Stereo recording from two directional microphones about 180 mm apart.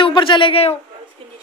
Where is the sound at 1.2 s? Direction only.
30° right (ahead or behind).